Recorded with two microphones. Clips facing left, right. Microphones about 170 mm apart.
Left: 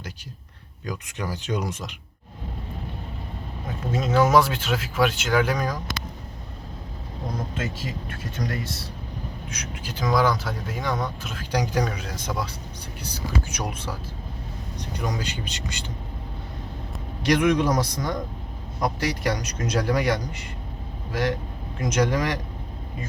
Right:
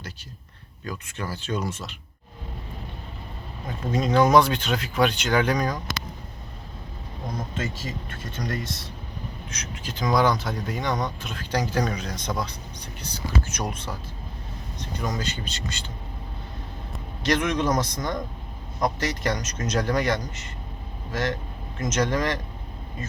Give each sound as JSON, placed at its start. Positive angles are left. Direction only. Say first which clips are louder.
{"t": 0.9, "sound": "speech", "louder": "left 2 dB", "side_deg": 15}
{"t": 3.9, "sound": "speech", "louder": "right 1 dB", "side_deg": 5}
{"t": 9.5, "sound": "speech", "louder": "left 1 dB", "side_deg": 10}
{"t": 17.2, "sound": "speech", "louder": "left 3 dB", "side_deg": 10}